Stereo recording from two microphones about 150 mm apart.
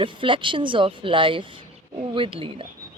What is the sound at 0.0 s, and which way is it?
Speech, 35° right (ahead or behind).